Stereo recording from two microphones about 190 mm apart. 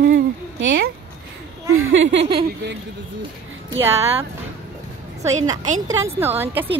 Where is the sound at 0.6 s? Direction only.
80° right.